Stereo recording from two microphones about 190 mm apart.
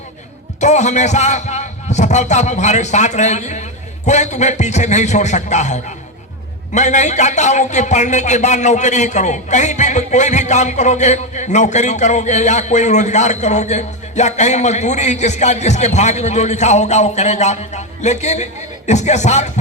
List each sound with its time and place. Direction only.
0.6 s speech: 40° left (ahead or behind)